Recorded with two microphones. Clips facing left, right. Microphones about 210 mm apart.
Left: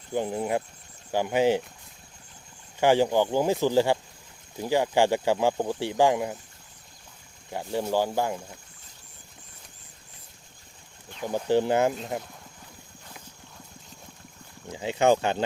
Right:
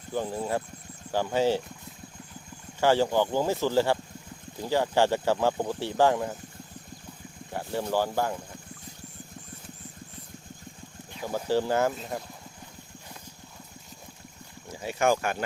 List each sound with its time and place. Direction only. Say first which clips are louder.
0.1 s speech: left 2 dB; 15° left (ahead or behind)
2.8 s speech: left 2 dB; 15° left (ahead or behind)
7.5 s speech: left 2 dB; 15° left (ahead or behind)
11.4 s speech: left 3 dB; 20° left (ahead or behind)
14.7 s speech: left 3 dB; 20° left (ahead or behind)